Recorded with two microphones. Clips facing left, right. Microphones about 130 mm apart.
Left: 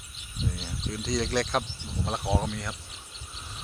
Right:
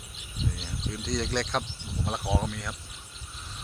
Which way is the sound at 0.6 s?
Centre (ahead or behind).